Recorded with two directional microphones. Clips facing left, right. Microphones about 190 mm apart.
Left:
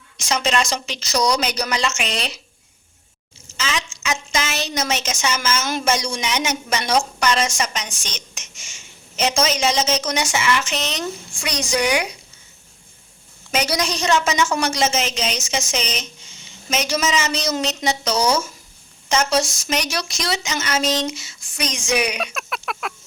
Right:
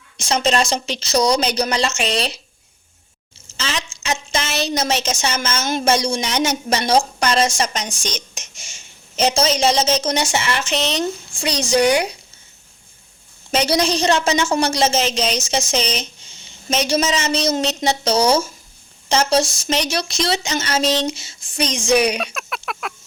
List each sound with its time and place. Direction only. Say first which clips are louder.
0.2 s speech: right 3 dB; 30° right (ahead or behind)
3.6 s a woman's voice: even; 30° right (ahead or behind)
13.5 s speech: right 4 dB; 30° right (ahead or behind)
22.2 s a sound: even; centre (ahead or behind)